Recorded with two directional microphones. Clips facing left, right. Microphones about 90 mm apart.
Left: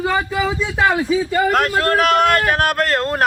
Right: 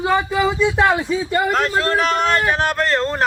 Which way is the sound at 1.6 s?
50° left (ahead or behind).